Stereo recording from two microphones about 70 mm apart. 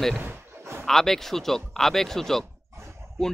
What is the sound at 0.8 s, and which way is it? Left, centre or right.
Speech, centre.